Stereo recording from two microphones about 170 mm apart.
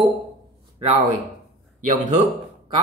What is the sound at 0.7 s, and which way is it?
Speech, 35° right (ahead or behind).